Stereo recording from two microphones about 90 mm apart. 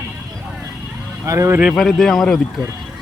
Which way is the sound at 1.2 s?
35° right (ahead or behind).